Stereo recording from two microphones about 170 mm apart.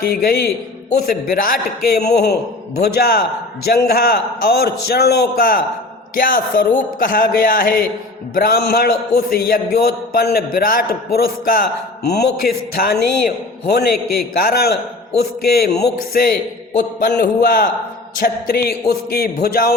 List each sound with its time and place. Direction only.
0.0 s a man's voice: 60° left (ahead or behind)
2.0 s a man's voice: 75° left (ahead or behind)